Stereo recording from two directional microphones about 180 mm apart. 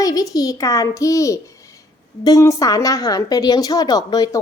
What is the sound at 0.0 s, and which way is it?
A woman's voice, 20° left (ahead or behind).